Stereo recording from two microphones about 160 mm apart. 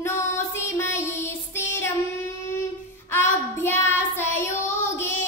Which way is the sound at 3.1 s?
15° left (ahead or behind).